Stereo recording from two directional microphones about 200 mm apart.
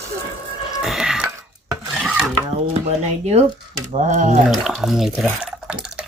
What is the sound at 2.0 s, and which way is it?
Filing, 5° right (ahead or behind).